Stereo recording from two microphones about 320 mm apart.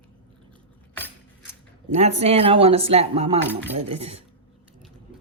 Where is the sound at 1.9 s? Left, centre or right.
Centre.